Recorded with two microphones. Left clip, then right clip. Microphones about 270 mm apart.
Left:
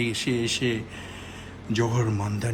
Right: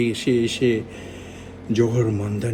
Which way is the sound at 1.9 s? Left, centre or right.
Centre.